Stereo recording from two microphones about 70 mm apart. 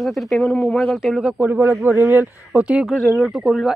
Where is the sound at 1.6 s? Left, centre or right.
Right.